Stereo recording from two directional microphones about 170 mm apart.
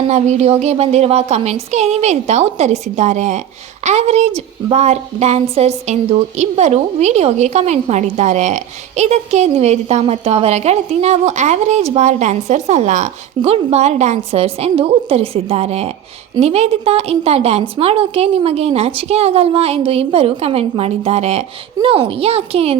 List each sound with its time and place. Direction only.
0.1 s a woman's voice: 40° right (ahead or behind)